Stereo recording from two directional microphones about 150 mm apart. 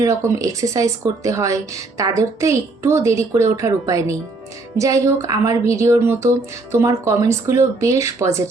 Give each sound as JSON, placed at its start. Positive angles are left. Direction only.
{"t": 0.0, "sound": "speech", "side_deg": -20}